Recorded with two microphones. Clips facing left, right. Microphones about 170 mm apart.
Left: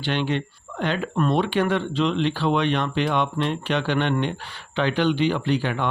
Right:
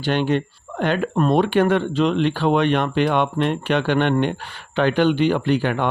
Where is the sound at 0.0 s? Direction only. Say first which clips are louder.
Right 5 dB; 45° right (ahead or behind).